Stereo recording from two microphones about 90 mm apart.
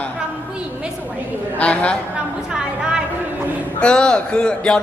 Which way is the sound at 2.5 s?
5° right (ahead or behind).